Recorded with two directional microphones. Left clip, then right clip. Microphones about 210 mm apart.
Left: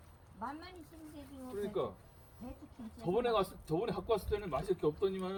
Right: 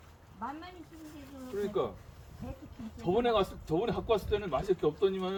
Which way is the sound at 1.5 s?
5° right (ahead or behind).